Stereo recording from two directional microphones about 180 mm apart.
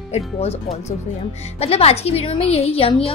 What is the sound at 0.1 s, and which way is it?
A woman's voice, 35° left (ahead or behind).